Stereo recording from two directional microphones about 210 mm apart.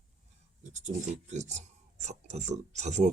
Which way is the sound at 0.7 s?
35° right (ahead or behind).